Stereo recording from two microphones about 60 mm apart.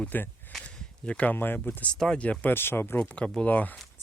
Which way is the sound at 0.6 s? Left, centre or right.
Left.